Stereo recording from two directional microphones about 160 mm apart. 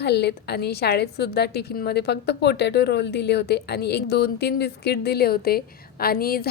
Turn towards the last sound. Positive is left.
turn(degrees=70)  # may be behind; listen again after turning